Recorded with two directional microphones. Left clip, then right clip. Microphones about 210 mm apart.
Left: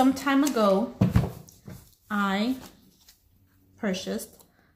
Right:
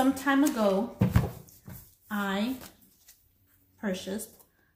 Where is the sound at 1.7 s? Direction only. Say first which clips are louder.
Left 4 dB; 5° right (ahead or behind).